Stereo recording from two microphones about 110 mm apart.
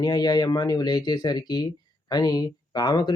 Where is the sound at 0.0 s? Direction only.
35° left (ahead or behind).